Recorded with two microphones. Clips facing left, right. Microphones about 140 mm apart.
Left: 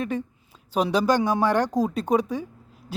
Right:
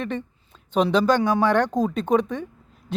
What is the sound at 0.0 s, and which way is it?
Speech, 5° left (ahead or behind).